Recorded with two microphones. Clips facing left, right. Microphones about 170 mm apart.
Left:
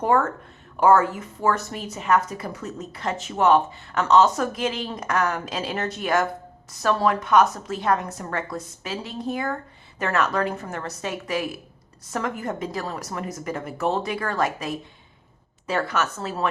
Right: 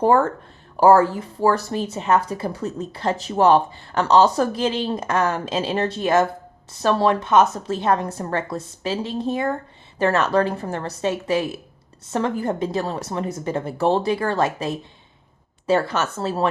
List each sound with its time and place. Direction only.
0.0 s a woman's voice: 30° right (ahead or behind)